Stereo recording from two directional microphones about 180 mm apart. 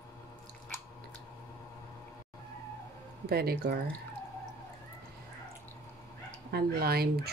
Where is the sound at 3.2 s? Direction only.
60° right (ahead or behind).